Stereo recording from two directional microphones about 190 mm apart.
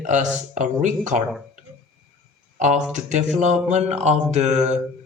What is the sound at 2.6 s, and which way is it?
Speech, 40° right (ahead or behind).